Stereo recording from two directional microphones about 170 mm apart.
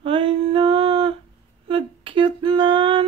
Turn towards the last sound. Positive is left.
turn(degrees=-30)  # may be behind; listen again after turning